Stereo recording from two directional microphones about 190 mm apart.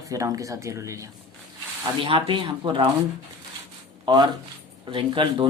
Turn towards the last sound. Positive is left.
turn(degrees=-25)  # may be behind; listen again after turning